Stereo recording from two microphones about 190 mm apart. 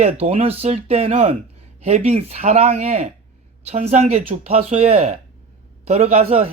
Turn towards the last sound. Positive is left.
turn(degrees=-35)  # may be behind; listen again after turning